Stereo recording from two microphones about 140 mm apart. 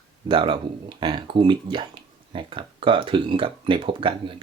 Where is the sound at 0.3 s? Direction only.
40° right (ahead or behind).